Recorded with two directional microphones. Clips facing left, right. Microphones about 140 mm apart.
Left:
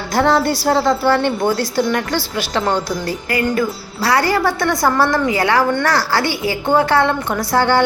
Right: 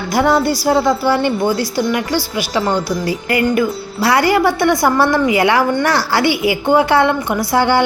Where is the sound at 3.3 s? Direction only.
20° right (ahead or behind).